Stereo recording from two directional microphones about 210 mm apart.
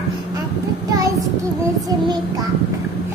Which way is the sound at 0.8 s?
15° right (ahead or behind).